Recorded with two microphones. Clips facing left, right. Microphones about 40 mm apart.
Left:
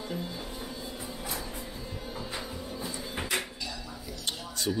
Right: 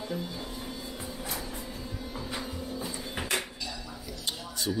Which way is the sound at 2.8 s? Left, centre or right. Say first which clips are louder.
Left 2 dB; centre.